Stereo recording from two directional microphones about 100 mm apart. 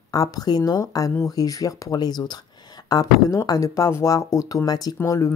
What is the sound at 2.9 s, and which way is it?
Speech, 35° left (ahead or behind).